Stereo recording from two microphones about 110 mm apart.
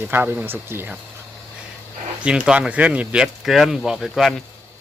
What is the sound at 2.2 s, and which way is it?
Speech, 10° right (ahead or behind).